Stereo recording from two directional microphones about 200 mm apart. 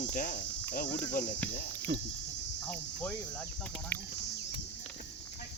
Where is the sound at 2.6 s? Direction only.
5° left (ahead or behind).